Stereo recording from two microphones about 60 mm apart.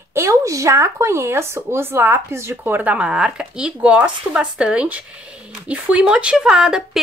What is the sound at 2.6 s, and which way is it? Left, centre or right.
Speech, right.